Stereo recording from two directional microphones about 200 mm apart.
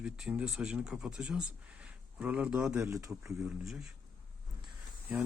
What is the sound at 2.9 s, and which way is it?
Speech, 15° right (ahead or behind).